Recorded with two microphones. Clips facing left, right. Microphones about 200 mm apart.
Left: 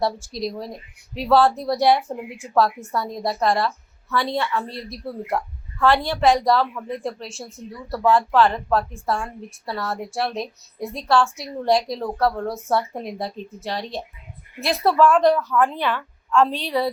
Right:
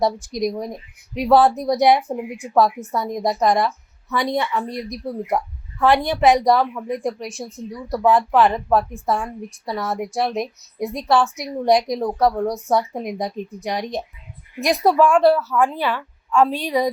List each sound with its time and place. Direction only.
0.3 s speech: 20° right (ahead or behind)